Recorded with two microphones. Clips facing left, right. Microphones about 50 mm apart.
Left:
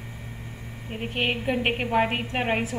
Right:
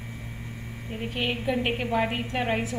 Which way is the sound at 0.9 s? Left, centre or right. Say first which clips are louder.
Left 2 dB; left.